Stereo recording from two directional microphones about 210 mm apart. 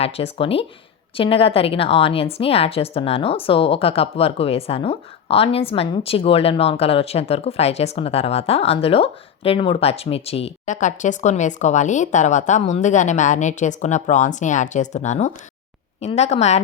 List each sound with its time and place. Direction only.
0.0 s a woman's voice: 25° left (ahead or behind)